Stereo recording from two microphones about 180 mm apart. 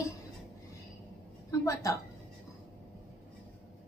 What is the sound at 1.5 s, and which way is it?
Speech, 15° left (ahead or behind).